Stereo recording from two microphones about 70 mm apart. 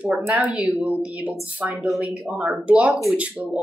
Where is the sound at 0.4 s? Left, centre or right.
Centre.